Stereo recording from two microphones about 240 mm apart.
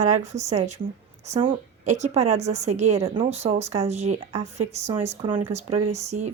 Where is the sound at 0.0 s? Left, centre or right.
Right.